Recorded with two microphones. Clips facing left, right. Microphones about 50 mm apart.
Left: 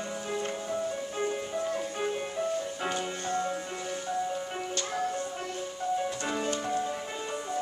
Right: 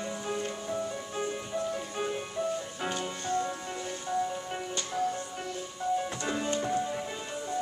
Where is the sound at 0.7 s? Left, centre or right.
Centre.